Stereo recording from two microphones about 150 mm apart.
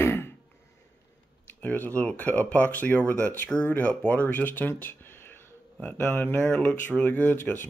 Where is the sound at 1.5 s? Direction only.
10° left (ahead or behind).